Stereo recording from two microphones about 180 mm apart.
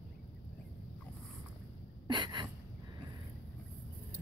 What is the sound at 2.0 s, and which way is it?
Gasp, 25° right (ahead or behind).